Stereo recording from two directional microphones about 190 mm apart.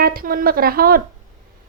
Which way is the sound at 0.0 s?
50° right (ahead or behind).